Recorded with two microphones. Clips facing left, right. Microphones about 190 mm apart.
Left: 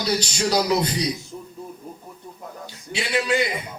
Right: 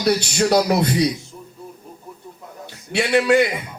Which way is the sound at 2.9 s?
60° right (ahead or behind).